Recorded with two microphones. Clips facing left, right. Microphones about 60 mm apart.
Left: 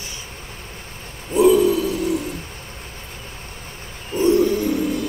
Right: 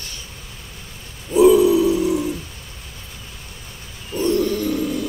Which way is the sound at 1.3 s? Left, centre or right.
Centre.